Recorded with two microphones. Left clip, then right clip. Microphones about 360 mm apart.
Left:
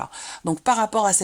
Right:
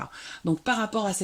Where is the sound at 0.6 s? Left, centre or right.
Centre.